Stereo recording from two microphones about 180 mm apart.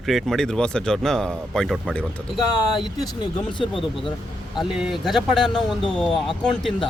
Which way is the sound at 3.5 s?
25° left (ahead or behind).